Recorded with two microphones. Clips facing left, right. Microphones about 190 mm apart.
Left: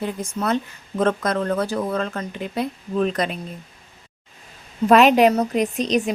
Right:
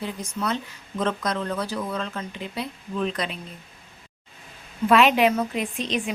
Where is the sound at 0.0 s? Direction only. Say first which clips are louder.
Left 4 dB; 50° left (ahead or behind).